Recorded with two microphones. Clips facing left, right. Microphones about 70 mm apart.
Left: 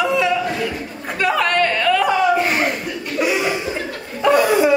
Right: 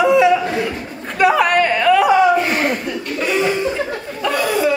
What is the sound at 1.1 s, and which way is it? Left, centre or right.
Chatter, centre.